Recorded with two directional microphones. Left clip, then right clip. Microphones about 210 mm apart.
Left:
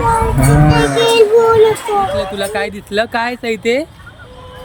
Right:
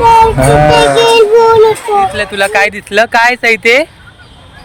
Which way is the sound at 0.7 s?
30° right (ahead or behind).